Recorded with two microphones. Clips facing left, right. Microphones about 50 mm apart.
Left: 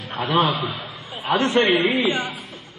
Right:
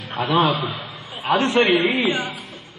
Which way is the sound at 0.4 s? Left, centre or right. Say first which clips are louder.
Right 2 dB; centre.